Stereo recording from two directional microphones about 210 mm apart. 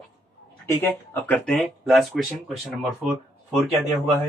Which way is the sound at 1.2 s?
5° left (ahead or behind).